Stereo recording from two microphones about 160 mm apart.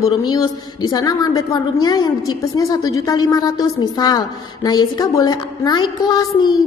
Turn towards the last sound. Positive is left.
turn(degrees=25)  # may be behind; listen again after turning